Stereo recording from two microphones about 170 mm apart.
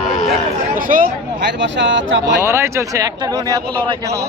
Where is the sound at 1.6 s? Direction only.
90° right.